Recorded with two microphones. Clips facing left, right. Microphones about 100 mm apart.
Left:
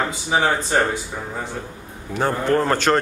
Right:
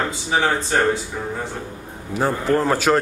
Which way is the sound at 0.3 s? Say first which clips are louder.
Even; 15° left (ahead or behind).